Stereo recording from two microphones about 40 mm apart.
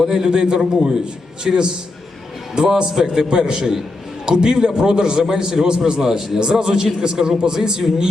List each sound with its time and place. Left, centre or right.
0.1 s a man's voice: centre